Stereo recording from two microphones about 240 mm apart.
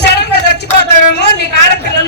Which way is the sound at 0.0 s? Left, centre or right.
Left.